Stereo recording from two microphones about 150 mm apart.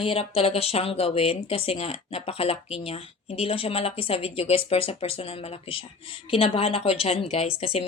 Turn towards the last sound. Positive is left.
turn(degrees=40)  # may be behind; listen again after turning